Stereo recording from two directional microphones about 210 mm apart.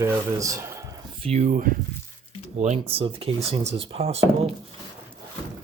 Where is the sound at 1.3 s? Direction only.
35° right (ahead or behind).